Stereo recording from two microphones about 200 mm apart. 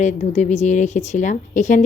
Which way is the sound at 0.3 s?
35° left (ahead or behind).